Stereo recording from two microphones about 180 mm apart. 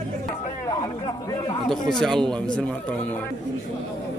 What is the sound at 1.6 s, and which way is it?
Speech, 5° left (ahead or behind).